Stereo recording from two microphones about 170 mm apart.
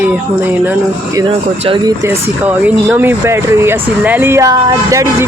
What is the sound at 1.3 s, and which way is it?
Speech, 35° right (ahead or behind).